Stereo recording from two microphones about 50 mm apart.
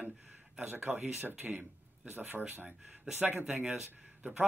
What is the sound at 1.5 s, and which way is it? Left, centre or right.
Speech, right.